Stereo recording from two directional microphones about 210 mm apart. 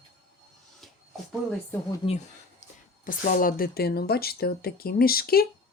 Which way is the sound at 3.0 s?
40° left (ahead or behind).